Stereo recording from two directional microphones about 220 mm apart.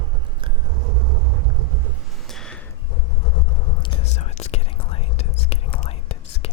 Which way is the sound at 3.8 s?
30° left (ahead or behind).